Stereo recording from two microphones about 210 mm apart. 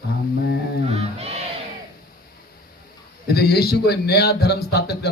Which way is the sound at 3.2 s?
50° left (ahead or behind).